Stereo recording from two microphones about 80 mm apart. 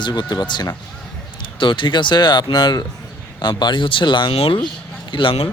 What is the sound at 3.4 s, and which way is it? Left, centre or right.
A man's voice, left.